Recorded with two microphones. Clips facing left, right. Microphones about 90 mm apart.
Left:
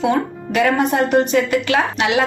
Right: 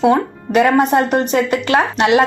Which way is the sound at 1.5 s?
45° right (ahead or behind).